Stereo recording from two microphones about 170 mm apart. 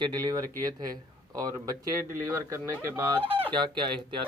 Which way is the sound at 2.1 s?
20° right (ahead or behind).